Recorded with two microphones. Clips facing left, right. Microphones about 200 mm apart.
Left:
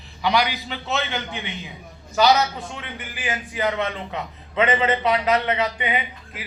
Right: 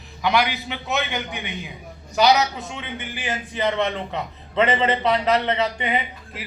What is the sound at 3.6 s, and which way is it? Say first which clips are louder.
A man's voice: right 2 dB; 5° left (ahead or behind).